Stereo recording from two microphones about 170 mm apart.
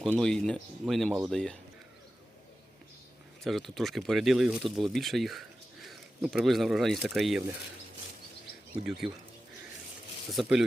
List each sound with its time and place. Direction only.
0.0 s speech: 5° left (ahead or behind)
3.4 s speech: centre (ahead or behind)
9.0 s speech: 30° right (ahead or behind)
10.3 s speech: 5° right (ahead or behind)